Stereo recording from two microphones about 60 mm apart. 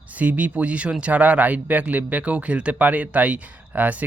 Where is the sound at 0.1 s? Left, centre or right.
Right.